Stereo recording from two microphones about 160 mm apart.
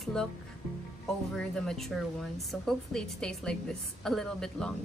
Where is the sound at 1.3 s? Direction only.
5° left (ahead or behind).